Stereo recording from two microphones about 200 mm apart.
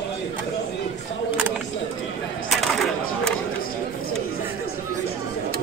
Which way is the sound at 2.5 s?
Centre (ahead or behind).